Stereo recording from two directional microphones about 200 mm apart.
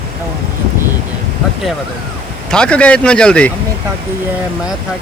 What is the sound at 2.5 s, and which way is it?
Speech, 5° left (ahead or behind).